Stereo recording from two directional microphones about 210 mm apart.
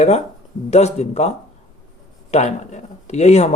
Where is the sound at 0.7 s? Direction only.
30° left (ahead or behind).